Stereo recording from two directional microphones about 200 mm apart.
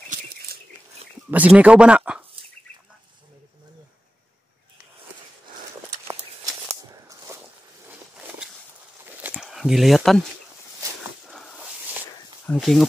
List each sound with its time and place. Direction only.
0.5 s a sound: 50° right (ahead or behind)
1.3 s speech: 5° right (ahead or behind)
7.3 s boat: 15° right (ahead or behind)
7.8 s walk: 10° right (ahead or behind)
9.0 s a sound: 5° right (ahead or behind)
12.4 s speech: centre (ahead or behind)